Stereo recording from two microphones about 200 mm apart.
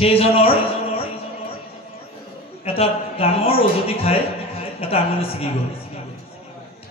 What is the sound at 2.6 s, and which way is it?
A man's voice, 30° left (ahead or behind).